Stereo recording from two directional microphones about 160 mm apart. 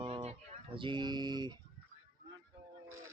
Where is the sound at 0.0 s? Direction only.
40° right (ahead or behind).